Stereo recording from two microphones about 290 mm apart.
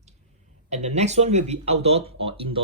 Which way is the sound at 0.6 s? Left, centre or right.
Right.